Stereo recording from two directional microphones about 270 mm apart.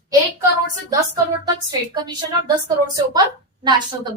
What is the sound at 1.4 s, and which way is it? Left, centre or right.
Speech, centre.